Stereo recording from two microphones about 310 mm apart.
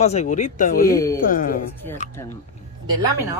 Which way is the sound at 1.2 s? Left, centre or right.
Left.